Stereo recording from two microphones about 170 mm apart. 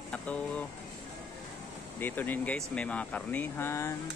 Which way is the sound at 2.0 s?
10° left (ahead or behind).